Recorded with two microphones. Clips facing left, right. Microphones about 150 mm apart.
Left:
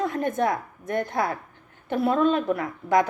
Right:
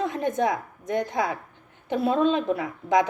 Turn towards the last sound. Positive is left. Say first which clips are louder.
# even
turn(degrees=-20)  # may be behind; listen again after turning